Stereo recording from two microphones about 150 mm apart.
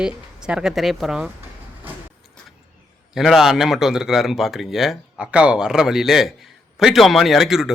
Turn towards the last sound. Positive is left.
turn(degrees=0)  # may be behind; listen again after turning